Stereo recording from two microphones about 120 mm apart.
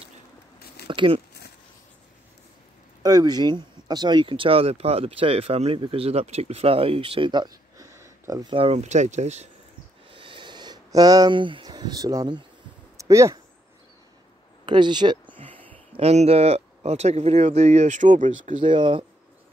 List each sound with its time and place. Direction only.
0.8 s speech: 45° right (ahead or behind)
3.0 s speech: 35° right (ahead or behind)
7.7 s a sound: 25° right (ahead or behind)
8.5 s speech: 60° right (ahead or behind)
10.1 s a sound: 45° right (ahead or behind)
11.3 s speech: 45° right (ahead or behind); by 12.3 s 30° right (ahead or behind)
12.9 s a sound: 25° right (ahead or behind)
14.7 s speech: 40° right (ahead or behind)
16.0 s speech: 60° right (ahead or behind); by 18.6 s 90° right
18.6 s speech: 40° right (ahead or behind)